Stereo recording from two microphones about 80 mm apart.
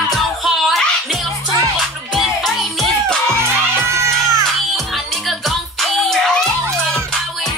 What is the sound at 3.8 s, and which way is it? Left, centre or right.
Children shouting, right.